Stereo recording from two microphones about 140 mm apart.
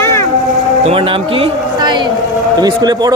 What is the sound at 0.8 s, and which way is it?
A man's voice, 40° right (ahead or behind).